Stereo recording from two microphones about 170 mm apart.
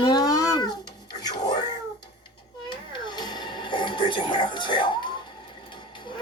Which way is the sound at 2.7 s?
25° left (ahead or behind).